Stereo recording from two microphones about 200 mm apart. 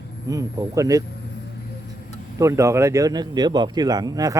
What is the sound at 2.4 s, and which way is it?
Speech, 15° right (ahead or behind).